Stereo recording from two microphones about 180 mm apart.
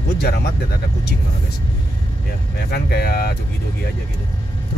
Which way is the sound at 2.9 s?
60° left (ahead or behind).